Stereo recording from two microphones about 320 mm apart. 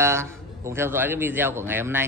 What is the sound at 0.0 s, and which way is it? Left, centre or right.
A man's voice, centre.